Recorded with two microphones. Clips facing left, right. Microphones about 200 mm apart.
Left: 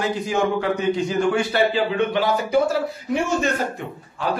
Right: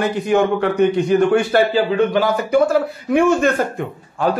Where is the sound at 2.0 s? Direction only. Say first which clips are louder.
Right 4 dB; 45° right (ahead or behind).